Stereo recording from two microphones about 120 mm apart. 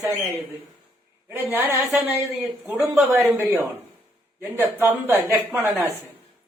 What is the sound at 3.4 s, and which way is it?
A man's voice, 25° right (ahead or behind).